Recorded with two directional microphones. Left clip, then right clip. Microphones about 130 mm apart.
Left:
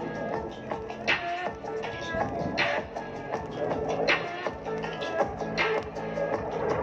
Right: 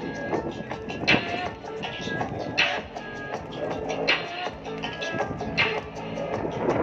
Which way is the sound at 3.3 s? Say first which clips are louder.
Left 1 dB; 15° left (ahead or behind).